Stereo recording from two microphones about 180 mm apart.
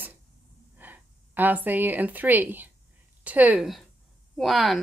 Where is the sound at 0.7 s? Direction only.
10° right (ahead or behind).